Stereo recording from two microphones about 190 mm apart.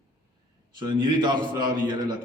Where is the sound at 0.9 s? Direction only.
25° right (ahead or behind).